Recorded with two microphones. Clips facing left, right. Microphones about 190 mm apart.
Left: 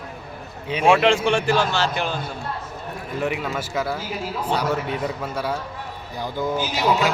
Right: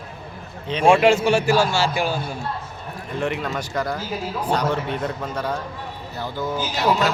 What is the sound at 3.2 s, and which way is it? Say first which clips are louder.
A man's voice: even; 5° left (ahead or behind).